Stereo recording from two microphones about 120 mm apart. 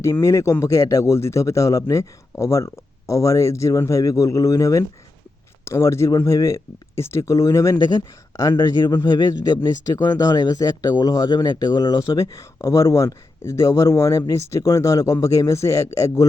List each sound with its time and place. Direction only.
0.0 s speech: 20° left (ahead or behind)
7.8 s speech: 35° left (ahead or behind)
9.6 s speech: 30° left (ahead or behind)